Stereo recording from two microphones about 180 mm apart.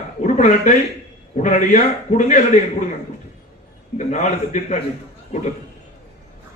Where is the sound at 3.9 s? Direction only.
40° left (ahead or behind).